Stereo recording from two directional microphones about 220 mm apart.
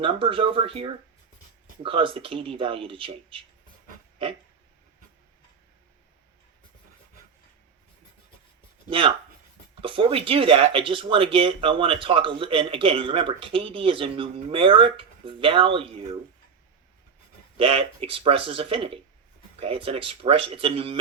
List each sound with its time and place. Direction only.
0.0 s speech: 25° right (ahead or behind)
8.9 s speech: 25° right (ahead or behind)
17.6 s speech: 25° right (ahead or behind)